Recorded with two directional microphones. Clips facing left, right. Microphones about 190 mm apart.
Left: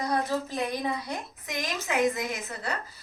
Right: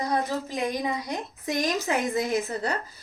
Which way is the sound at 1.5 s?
35° right (ahead or behind).